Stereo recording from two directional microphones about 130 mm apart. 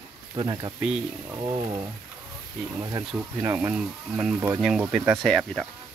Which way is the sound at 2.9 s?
25° right (ahead or behind).